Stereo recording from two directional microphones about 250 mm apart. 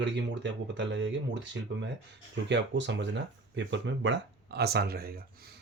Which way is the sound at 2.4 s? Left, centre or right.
Right.